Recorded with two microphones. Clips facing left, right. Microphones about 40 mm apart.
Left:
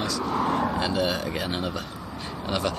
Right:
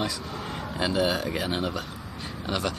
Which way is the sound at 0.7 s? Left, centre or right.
Centre.